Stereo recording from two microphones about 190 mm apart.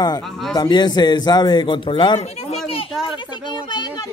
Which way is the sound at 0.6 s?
20° left (ahead or behind).